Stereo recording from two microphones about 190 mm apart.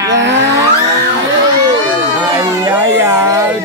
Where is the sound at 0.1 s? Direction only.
70° right (ahead or behind).